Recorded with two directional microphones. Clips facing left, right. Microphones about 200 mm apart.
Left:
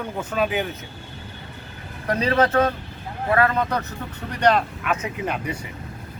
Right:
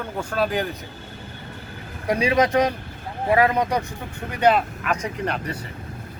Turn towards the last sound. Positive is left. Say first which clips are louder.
# even
turn(degrees=5)  # may be behind; listen again after turning